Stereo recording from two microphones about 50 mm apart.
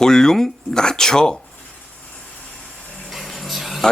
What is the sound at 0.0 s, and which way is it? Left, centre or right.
Speech, centre.